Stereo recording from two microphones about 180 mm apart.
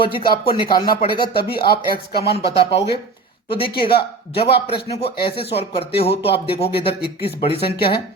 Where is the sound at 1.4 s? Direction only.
60° left (ahead or behind).